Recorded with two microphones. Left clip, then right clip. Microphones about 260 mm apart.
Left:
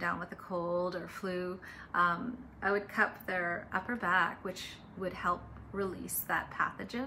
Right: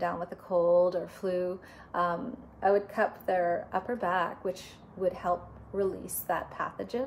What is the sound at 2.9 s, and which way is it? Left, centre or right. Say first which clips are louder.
A woman's voice: right 3 dB; centre.